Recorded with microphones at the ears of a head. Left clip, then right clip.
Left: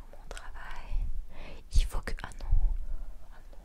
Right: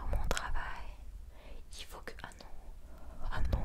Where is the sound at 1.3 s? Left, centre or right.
Left.